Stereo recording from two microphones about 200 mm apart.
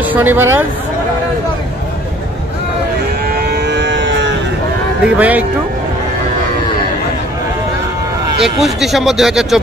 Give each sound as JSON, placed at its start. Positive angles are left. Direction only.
{"t": 0.0, "sound": "speech", "side_deg": -10}
{"t": 3.3, "sound": "a sound", "side_deg": -55}
{"t": 5.1, "sound": "speech", "side_deg": -10}
{"t": 8.4, "sound": "speech", "side_deg": 0}